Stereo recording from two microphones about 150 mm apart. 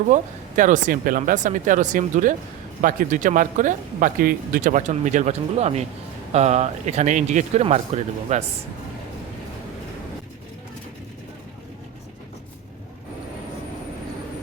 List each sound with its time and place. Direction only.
0.1 s speech: 60° right (ahead or behind)